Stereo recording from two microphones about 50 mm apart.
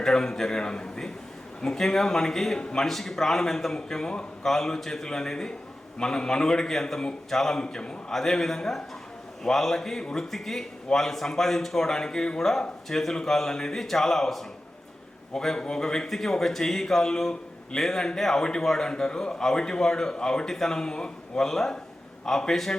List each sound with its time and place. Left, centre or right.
0.0 s a man's voice: centre